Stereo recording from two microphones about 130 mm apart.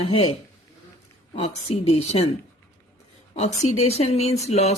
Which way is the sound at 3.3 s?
55° left (ahead or behind).